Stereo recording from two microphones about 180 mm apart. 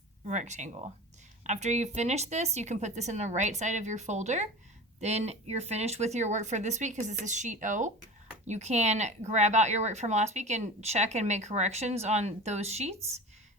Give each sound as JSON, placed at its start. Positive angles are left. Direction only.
{"t": 0.3, "sound": "speech", "side_deg": -40}